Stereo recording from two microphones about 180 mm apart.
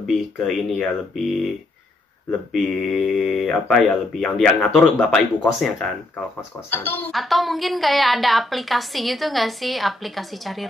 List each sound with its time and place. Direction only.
0.0 s a woman's voice: centre (ahead or behind)
2.5 s a woman's voice: centre (ahead or behind)